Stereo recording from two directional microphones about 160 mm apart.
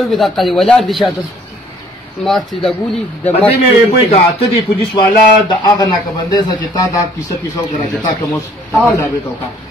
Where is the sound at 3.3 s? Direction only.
40° left (ahead or behind).